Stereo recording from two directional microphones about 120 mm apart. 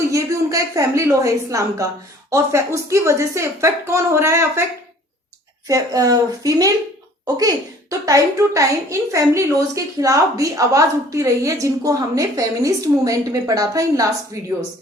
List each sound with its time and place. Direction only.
0.0 s a woman's voice: 25° right (ahead or behind)
5.6 s a child's voice: 30° right (ahead or behind)